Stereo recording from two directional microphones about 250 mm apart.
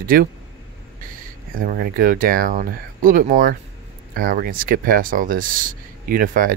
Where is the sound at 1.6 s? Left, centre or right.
Right.